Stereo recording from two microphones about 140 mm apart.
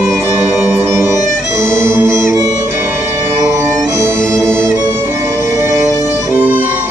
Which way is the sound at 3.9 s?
20° right (ahead or behind).